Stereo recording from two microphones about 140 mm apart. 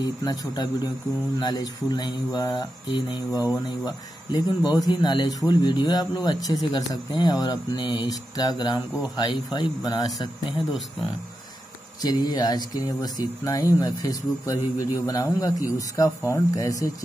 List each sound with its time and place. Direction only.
0.0 s speech: 30° left (ahead or behind)
12.0 s speech: 30° left (ahead or behind)